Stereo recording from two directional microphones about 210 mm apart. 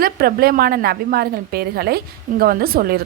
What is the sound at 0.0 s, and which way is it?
A woman's voice, 45° right (ahead or behind).